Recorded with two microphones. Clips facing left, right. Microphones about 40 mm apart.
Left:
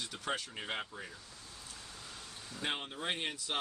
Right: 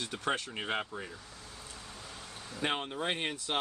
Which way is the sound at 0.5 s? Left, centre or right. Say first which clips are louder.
Right 5 dB; right.